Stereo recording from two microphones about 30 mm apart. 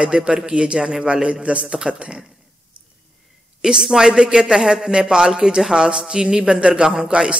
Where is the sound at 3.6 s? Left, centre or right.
Centre.